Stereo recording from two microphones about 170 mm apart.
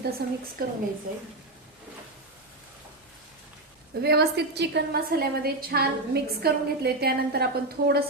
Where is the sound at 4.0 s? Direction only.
70° right (ahead or behind).